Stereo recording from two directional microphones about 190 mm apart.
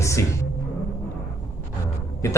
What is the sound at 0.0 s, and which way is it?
Music, 15° left (ahead or behind).